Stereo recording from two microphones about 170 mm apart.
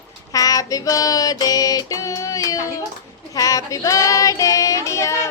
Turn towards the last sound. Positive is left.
turn(degrees=20)  # may be behind; listen again after turning